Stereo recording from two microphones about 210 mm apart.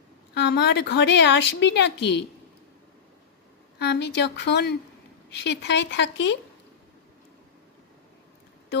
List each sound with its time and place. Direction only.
0.3 s a woman's voice: 55° left (ahead or behind)
3.8 s a woman's voice: 55° left (ahead or behind)